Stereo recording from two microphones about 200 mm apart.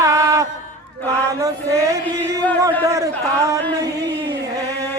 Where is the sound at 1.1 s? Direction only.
15° right (ahead or behind).